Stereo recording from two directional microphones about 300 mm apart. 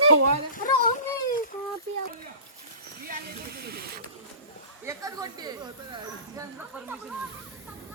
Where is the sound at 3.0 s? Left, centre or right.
Right.